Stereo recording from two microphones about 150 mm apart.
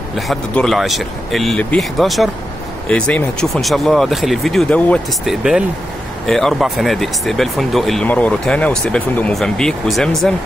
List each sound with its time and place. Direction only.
0.3 s speech: centre (ahead or behind)
5.2 s speech: 5° right (ahead or behind)